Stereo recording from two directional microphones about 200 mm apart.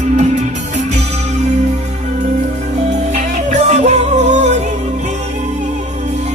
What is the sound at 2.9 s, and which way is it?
Music, 35° right (ahead or behind).